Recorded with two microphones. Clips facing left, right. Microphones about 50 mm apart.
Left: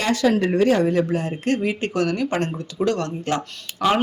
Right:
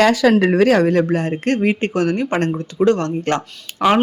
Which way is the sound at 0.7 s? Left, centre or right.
Right.